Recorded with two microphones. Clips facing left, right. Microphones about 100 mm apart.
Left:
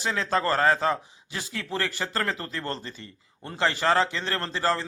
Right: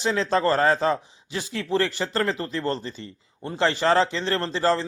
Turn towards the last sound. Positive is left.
turn(degrees=-25)  # may be behind; listen again after turning